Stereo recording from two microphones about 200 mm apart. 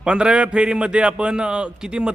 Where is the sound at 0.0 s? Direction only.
5° right (ahead or behind).